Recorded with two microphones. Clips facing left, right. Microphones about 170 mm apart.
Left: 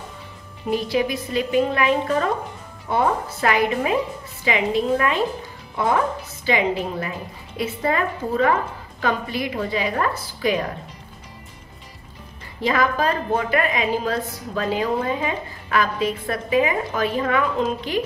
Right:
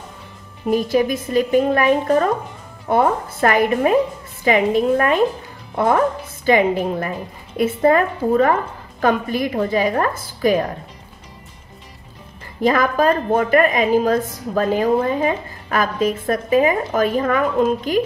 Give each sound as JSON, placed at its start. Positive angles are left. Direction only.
{"t": 0.7, "sound": "a woman's voice", "side_deg": -45}
{"t": 12.6, "sound": "a woman's voice", "side_deg": -45}